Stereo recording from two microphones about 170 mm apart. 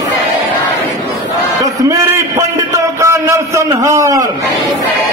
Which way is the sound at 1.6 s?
20° right (ahead or behind).